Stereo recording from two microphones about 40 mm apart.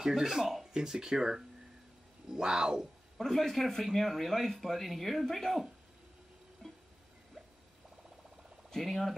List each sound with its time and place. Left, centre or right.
0.0 s speech: centre
0.7 s speech: centre
3.2 s speech: centre
6.6 s music: centre
8.6 s a sound: centre